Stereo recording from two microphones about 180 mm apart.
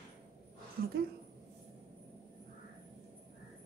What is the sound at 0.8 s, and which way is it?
Speech, 60° right (ahead or behind).